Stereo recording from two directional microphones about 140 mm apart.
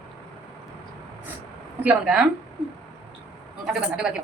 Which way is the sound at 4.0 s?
5° right (ahead or behind).